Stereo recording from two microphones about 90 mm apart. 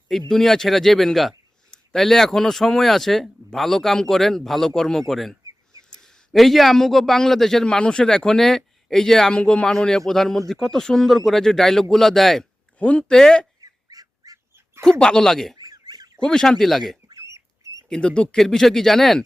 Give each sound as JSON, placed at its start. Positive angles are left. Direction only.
{"t": 0.3, "sound": "a man's voice", "side_deg": 5}
{"t": 12.8, "sound": "speech", "side_deg": 15}
{"t": 13.6, "sound": "goose", "side_deg": -45}
{"t": 14.8, "sound": "speech", "side_deg": 10}
{"t": 15.5, "sound": "fowl", "side_deg": -50}
{"t": 16.1, "sound": "a man's voice", "side_deg": 5}
{"t": 17.1, "sound": "duck", "side_deg": -35}
{"t": 17.8, "sound": "a man's voice", "side_deg": 10}